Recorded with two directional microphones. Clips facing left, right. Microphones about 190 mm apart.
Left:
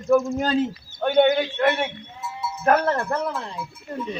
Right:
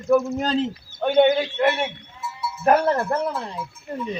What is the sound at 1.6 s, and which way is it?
Wind chime, 5° right (ahead or behind).